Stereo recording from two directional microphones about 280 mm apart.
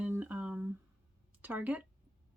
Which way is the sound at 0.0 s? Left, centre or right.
Centre.